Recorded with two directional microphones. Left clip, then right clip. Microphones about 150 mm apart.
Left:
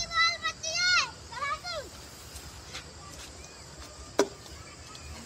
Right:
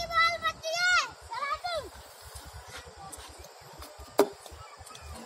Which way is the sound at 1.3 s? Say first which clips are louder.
Right 5 dB; 20° left (ahead or behind).